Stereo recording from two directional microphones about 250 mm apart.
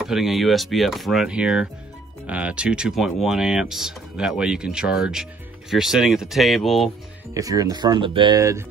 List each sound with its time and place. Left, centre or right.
0.0 s speech: centre
7.3 s speech: centre